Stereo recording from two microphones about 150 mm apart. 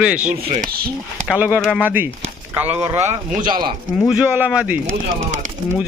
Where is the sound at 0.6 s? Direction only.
90° right.